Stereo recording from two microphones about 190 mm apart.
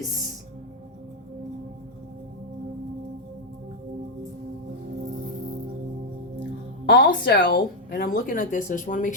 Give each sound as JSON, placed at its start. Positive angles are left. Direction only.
{"t": 6.8, "sound": "speech", "side_deg": 55}